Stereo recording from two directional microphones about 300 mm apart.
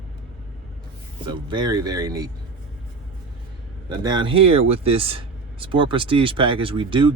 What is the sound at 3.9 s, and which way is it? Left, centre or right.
Speech, centre.